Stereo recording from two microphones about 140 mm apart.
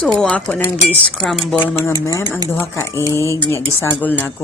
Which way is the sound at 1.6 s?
15° left (ahead or behind).